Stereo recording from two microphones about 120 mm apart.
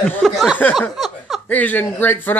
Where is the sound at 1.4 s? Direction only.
15° left (ahead or behind).